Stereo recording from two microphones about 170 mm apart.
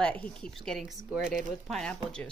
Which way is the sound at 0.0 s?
5° left (ahead or behind).